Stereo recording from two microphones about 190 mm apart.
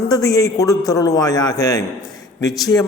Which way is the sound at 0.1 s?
20° left (ahead or behind).